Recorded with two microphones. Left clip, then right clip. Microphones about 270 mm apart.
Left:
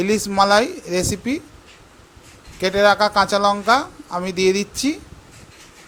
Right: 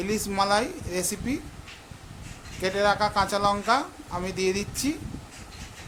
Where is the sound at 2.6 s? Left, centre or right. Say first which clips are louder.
Left 8 dB; centre.